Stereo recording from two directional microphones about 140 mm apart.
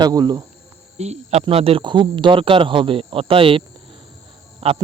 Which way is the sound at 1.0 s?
50° right (ahead or behind).